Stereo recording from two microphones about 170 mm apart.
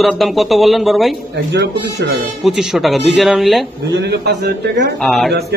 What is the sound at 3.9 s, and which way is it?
Speech, 80° right.